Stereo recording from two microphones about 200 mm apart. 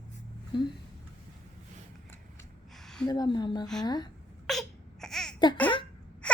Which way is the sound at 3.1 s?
20° left (ahead or behind).